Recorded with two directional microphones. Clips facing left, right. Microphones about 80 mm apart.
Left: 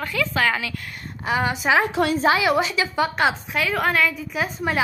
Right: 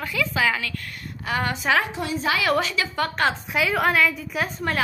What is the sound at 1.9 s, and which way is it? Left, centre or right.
Speech, left.